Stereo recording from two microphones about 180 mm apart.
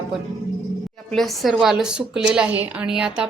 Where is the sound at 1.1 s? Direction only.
Centre (ahead or behind).